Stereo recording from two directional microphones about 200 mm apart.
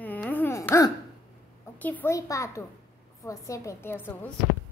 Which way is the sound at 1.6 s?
10° left (ahead or behind).